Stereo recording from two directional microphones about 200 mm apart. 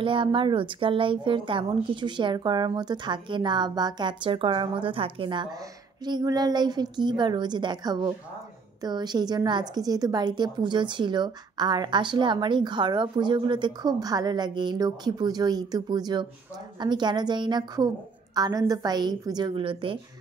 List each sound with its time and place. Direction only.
0.0 s a woman's voice: 25° right (ahead or behind)